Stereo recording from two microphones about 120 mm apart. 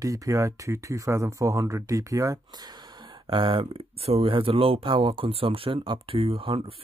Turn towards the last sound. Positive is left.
turn(degrees=-50)  # may be behind; listen again after turning